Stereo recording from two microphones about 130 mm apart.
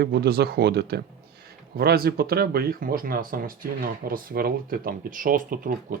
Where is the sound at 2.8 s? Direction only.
90° right.